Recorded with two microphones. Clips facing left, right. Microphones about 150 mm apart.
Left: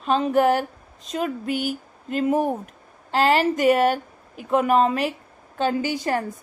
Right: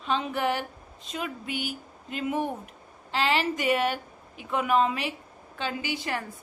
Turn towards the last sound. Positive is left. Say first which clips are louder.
# left 8 dB
turn(degrees=45)  # may be behind; listen again after turning